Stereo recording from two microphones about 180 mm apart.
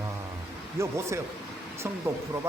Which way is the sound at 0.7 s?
15° right (ahead or behind).